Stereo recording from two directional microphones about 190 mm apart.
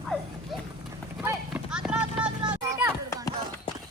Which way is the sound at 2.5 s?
10° right (ahead or behind).